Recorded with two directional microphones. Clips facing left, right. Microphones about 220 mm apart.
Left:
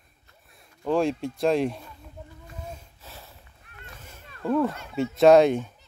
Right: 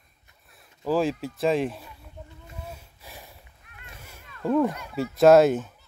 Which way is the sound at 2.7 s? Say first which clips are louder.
Left 1 dB; 10° right (ahead or behind).